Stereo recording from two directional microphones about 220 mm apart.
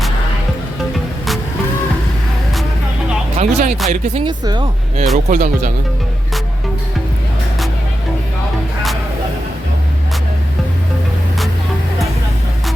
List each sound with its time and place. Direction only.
3.3 s speech: 35° right (ahead or behind); by 4.7 s 20° right (ahead or behind)
5.1 s speech: 35° right (ahead or behind)